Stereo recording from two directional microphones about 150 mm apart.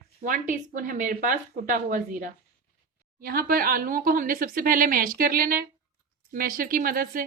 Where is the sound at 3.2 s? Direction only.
75° right (ahead or behind).